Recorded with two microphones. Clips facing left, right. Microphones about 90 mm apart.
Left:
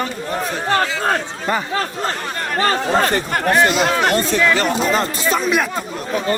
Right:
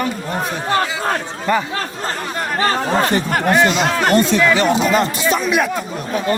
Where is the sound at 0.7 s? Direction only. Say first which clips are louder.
Even; 15° right (ahead or behind).